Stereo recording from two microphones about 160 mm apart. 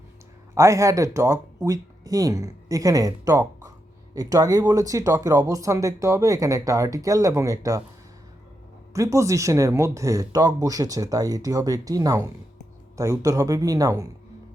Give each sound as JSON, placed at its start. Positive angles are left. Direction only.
{"t": 0.5, "sound": "speech", "side_deg": -20}
{"t": 8.9, "sound": "speech", "side_deg": -20}